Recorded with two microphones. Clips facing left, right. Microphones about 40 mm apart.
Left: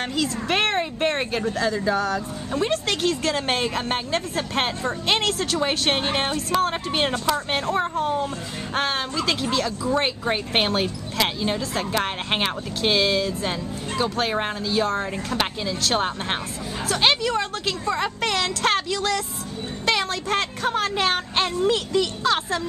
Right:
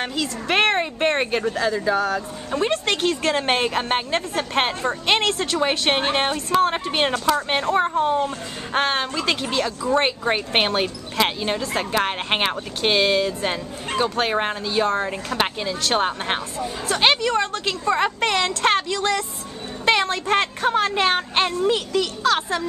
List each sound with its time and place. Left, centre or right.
0.0 s a woman's voice: centre
21.9 s speech: centre